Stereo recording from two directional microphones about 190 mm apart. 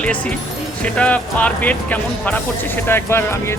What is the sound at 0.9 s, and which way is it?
Speech, 5° left (ahead or behind).